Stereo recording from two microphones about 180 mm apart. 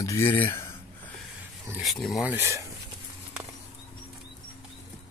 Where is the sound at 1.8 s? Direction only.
Centre (ahead or behind).